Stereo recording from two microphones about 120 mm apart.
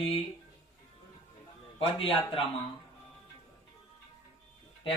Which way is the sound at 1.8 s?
50° left (ahead or behind).